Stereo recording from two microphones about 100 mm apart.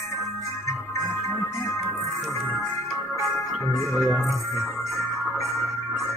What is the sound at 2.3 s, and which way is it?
Music, 20° right (ahead or behind).